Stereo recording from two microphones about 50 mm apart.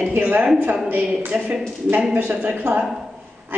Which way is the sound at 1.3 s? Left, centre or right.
Centre.